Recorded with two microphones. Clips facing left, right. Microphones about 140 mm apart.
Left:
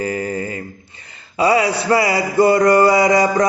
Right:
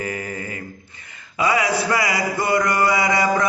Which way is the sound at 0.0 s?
30° left (ahead or behind).